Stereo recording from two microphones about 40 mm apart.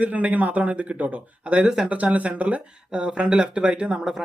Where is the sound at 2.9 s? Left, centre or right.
Right.